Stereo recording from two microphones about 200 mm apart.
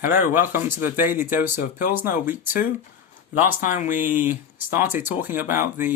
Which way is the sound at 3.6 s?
40° left (ahead or behind).